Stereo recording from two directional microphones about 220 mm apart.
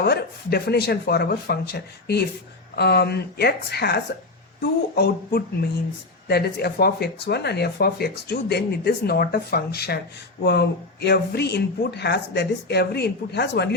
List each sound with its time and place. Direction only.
0.0 s speech: 45° left (ahead or behind)